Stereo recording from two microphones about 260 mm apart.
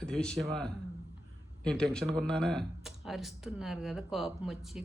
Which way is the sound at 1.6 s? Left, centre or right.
Centre.